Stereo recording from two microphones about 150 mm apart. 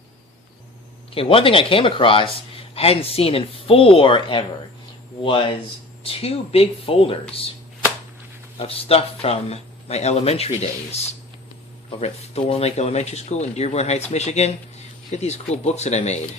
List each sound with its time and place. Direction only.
1.1 s speech: 40° left (ahead or behind)
8.5 s speech: 40° left (ahead or behind)